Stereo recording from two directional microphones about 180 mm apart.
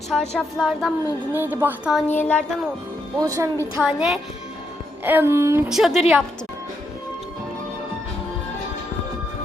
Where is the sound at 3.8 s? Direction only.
5° right (ahead or behind).